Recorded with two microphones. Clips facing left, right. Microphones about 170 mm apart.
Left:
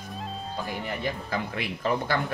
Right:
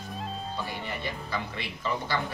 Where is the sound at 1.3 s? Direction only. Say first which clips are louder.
Left 4 dB; 60° left (ahead or behind).